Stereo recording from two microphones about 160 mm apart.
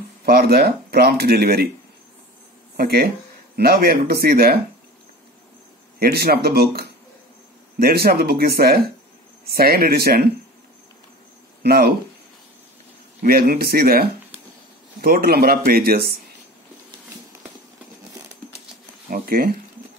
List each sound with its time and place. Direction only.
0.2 s speech: 75° right (ahead or behind)
2.8 s speech: 75° right (ahead or behind)
5.9 s speech: 75° right (ahead or behind)
11.6 s speech: 80° right
13.2 s speech: 70° right (ahead or behind)
19.0 s a sound: 65° right (ahead or behind)